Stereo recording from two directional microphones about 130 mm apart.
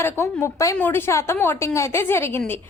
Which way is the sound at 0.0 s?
20° left (ahead or behind).